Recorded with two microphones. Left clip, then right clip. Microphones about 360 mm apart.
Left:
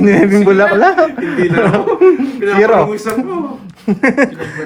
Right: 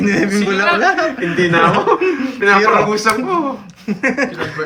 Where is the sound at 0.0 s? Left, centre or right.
Centre.